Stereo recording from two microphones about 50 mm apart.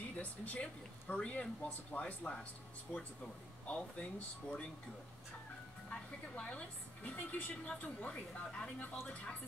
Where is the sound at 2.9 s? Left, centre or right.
Centre.